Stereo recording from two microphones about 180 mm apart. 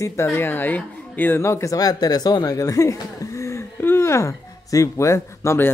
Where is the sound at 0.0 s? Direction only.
15° left (ahead or behind).